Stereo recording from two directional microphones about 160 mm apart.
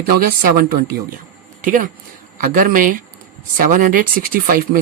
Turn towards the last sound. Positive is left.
turn(degrees=-60)  # may be behind; listen again after turning